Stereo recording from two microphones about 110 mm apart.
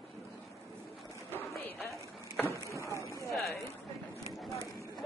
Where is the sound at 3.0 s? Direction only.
30° left (ahead or behind).